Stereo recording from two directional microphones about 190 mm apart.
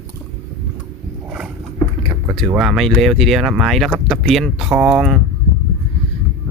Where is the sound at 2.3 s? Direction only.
Centre (ahead or behind).